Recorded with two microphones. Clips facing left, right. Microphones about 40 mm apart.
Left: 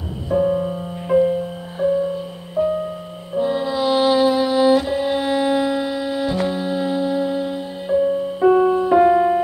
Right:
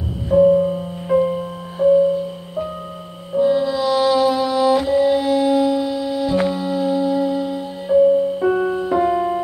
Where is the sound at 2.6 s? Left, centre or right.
Centre.